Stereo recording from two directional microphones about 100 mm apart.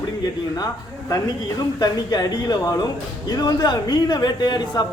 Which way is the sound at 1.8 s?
40° left (ahead or behind).